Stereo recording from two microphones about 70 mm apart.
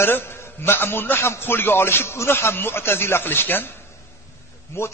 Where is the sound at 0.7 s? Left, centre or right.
Left.